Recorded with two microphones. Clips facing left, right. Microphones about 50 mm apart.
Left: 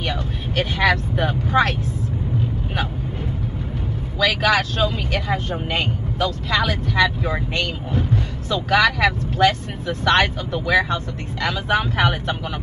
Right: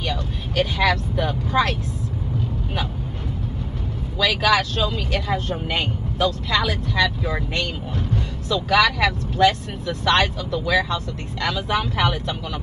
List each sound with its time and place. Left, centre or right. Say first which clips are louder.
0.1 s speech: left 1 dB; left
4.2 s speech: left 1 dB; left
8.5 s speech: left 1 dB; left